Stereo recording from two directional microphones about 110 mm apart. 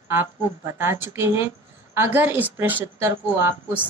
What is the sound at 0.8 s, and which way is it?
Speech, 20° right (ahead or behind).